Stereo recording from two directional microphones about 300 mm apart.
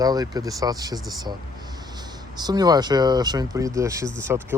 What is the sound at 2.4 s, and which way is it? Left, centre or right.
Speech, centre.